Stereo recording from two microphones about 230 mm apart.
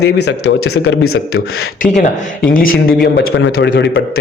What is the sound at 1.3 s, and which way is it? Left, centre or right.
Speech, left.